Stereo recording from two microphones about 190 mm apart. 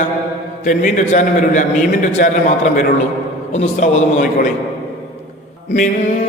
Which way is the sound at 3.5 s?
40° left (ahead or behind).